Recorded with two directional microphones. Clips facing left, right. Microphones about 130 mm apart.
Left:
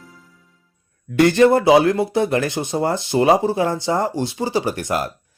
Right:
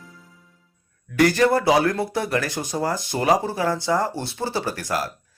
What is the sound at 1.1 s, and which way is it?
Speech, 25° left (ahead or behind).